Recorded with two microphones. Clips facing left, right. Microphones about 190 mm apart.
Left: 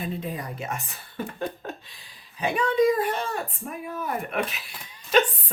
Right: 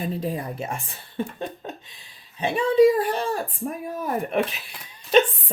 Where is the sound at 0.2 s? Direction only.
30° right (ahead or behind).